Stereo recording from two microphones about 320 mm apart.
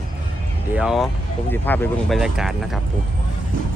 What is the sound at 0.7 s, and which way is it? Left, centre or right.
Speech, centre.